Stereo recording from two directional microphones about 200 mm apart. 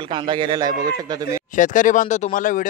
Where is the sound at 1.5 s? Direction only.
40° left (ahead or behind).